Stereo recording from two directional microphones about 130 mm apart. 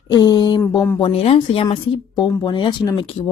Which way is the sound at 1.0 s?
50° left (ahead or behind).